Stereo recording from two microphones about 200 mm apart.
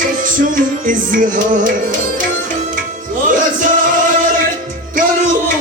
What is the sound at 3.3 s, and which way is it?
Music, 40° right (ahead or behind).